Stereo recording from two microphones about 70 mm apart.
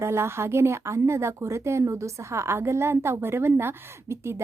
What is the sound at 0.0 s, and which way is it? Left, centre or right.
Speech, right.